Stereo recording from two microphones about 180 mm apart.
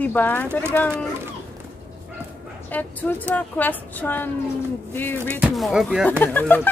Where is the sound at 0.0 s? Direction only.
10° left (ahead or behind).